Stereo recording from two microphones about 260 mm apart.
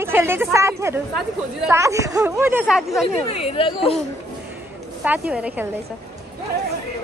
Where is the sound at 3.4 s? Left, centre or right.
Left.